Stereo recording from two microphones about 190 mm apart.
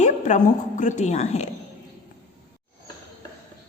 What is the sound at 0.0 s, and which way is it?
A woman's voice, 40° left (ahead or behind).